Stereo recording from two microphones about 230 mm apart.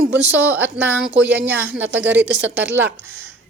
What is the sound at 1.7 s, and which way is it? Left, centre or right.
A woman's voice, right.